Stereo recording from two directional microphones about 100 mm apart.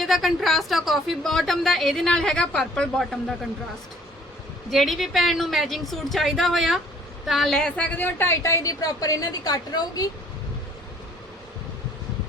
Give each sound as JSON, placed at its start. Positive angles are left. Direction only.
{"t": 0.0, "sound": "a woman's voice", "side_deg": 0}
{"t": 4.7, "sound": "a woman's voice", "side_deg": 0}
{"t": 7.9, "sound": "a woman's voice", "side_deg": 20}